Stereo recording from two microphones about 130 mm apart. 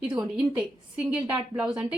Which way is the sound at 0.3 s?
10° right (ahead or behind).